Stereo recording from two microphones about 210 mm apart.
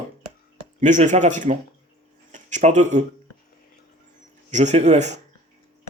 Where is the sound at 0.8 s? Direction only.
35° right (ahead or behind).